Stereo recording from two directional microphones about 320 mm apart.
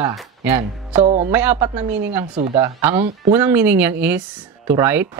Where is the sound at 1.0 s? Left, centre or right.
Right.